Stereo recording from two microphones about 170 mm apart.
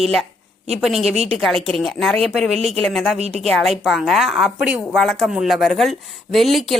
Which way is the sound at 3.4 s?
Centre (ahead or behind).